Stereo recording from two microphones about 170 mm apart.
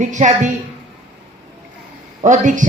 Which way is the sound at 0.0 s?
45° right (ahead or behind).